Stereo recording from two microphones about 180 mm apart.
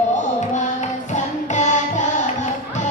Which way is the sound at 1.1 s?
40° left (ahead or behind).